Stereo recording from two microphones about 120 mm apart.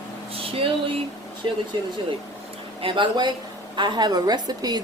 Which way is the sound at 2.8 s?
40° right (ahead or behind).